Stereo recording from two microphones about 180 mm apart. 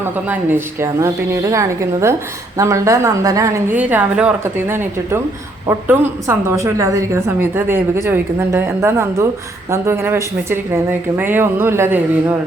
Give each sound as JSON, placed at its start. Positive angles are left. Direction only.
{"t": 0.0, "sound": "a woman's voice", "side_deg": -10}